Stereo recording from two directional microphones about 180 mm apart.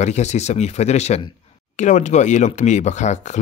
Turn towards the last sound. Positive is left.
turn(degrees=40)  # may be behind; listen again after turning